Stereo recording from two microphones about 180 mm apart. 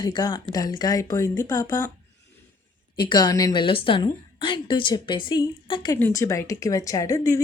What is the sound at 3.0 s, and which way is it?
A woman's voice, 25° left (ahead or behind).